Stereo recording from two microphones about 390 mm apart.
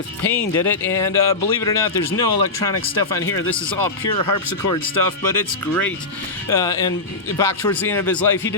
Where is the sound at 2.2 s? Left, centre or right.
Left.